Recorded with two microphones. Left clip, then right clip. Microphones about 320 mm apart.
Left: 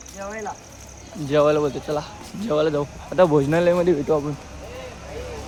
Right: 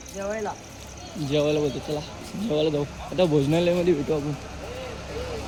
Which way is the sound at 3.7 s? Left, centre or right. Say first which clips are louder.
Left 4 dB; centre.